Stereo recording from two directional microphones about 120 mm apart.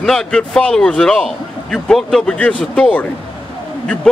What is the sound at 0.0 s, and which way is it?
A man's voice, 5° left (ahead or behind).